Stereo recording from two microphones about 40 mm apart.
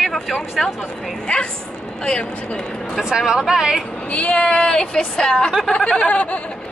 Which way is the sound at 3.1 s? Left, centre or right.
Centre.